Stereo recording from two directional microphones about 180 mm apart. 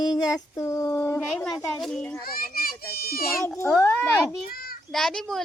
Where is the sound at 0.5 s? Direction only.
15° left (ahead or behind).